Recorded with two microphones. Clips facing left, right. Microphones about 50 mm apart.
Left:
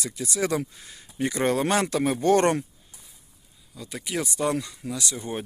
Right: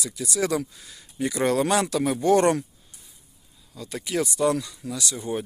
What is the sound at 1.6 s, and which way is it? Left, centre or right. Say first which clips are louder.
Speech: right 1 dB; left.